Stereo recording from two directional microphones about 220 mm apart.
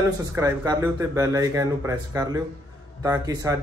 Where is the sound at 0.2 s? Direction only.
15° right (ahead or behind).